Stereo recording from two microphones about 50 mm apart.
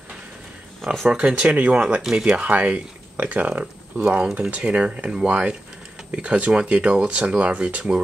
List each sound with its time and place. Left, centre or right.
1.1 s speech: right
2.3 s speech: right